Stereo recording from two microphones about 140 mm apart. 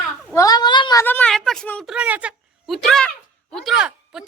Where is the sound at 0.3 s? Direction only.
30° left (ahead or behind).